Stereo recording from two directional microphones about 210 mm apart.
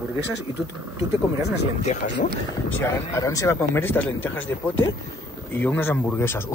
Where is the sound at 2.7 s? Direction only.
15° left (ahead or behind).